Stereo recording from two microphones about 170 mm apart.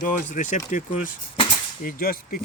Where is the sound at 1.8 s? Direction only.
55° left (ahead or behind).